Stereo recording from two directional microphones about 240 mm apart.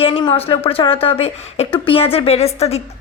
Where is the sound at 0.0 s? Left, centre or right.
Left.